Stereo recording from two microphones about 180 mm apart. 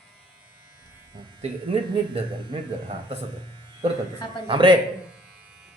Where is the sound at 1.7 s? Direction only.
30° right (ahead or behind).